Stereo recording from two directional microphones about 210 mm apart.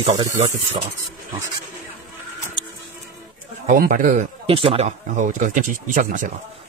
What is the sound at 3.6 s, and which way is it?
A man's voice, 40° right (ahead or behind).